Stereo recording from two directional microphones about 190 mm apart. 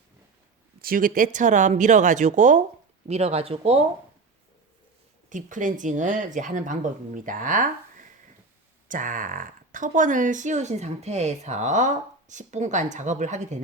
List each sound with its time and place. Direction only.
0.8 s speech: 50° right (ahead or behind)
5.3 s speech: 40° right (ahead or behind)